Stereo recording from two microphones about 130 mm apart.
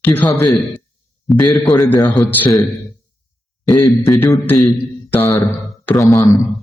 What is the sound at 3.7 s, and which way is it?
Speech, 20° left (ahead or behind).